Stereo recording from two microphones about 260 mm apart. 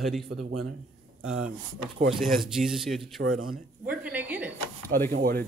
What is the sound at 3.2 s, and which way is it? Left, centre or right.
Speech, right.